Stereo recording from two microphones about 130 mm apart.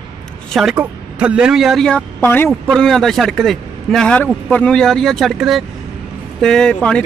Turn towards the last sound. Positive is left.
turn(degrees=10)  # may be behind; listen again after turning